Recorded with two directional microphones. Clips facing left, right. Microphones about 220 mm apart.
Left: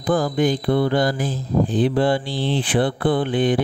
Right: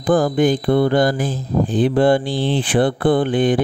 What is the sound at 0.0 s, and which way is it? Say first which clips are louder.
Mantra: right 4 dB; 50° right (ahead or behind).